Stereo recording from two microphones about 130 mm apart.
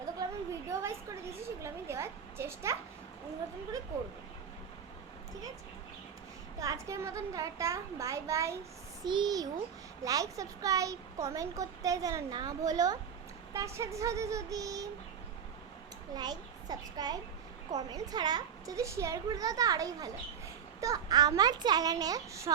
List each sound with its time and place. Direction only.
0.7 s a sound: 20° right (ahead or behind)
6.6 s speech: 25° right (ahead or behind)
9.0 s a child's voice: 35° right (ahead or behind)
16.1 s a child's voice: 30° right (ahead or behind)